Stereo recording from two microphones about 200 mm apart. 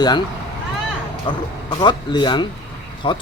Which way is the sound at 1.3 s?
25° left (ahead or behind).